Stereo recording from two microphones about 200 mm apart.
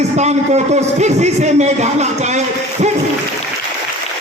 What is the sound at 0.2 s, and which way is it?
A man's voice, 35° right (ahead or behind).